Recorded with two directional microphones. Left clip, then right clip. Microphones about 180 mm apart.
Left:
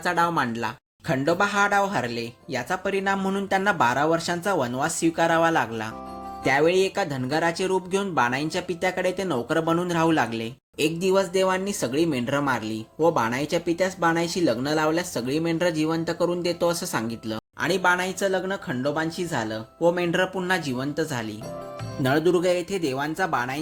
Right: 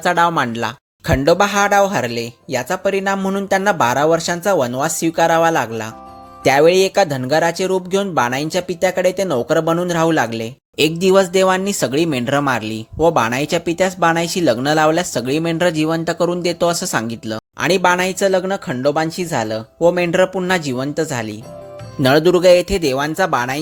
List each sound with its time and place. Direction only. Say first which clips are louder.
0.0 s speech: right 8 dB; 45° right (ahead or behind)
6.4 s speech: right 9 dB; 45° right (ahead or behind)
10.8 s speech: right 9 dB; 50° right (ahead or behind)
22.0 s speech: right 10 dB; 55° right (ahead or behind)